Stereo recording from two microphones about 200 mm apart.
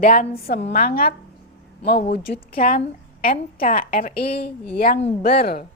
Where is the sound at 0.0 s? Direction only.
50° left (ahead or behind).